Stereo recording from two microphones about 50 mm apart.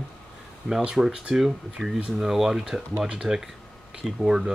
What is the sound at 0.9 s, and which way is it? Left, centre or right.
Speech, centre.